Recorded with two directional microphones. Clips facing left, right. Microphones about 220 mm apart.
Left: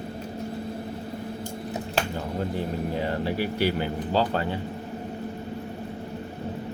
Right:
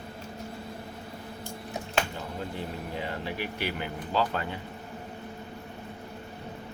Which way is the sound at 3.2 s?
35° left (ahead or behind).